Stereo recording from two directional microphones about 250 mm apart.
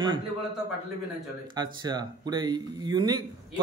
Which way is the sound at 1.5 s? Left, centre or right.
Centre.